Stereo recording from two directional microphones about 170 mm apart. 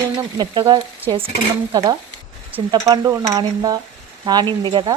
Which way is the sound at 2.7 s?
20° right (ahead or behind).